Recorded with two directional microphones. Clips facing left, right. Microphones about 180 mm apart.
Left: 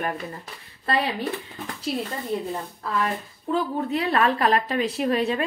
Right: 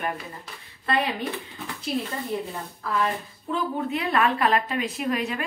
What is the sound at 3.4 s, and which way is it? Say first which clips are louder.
A woman's voice: left 3 dB; 35° left (ahead or behind).